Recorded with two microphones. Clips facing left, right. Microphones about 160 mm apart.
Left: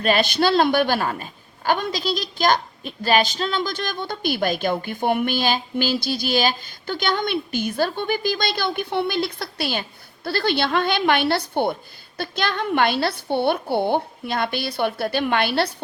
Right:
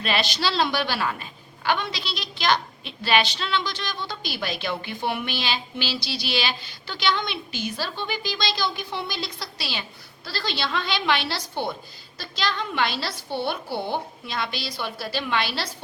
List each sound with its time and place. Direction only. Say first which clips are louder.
0.0 s a woman's voice: left 7 dB; 50° left (ahead or behind)